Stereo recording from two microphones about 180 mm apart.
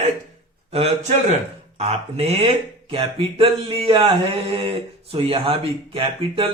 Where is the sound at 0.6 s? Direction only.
35° right (ahead or behind).